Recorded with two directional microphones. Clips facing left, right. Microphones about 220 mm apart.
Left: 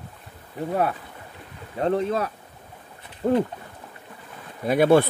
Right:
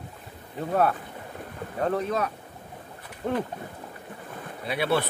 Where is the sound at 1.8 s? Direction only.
30° left (ahead or behind).